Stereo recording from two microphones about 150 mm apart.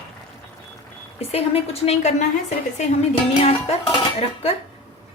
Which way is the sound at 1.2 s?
40° left (ahead or behind).